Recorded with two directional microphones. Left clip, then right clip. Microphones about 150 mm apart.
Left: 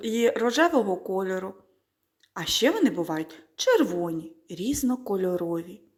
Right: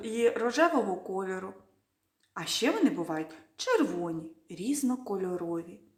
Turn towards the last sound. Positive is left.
turn(degrees=30)  # may be behind; listen again after turning